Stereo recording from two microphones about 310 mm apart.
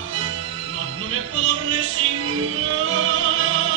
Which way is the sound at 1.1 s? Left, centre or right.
Right.